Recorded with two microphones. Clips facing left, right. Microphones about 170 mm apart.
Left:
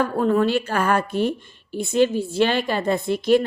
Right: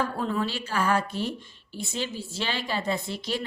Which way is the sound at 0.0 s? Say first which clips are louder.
Left 9 dB; 55° left (ahead or behind).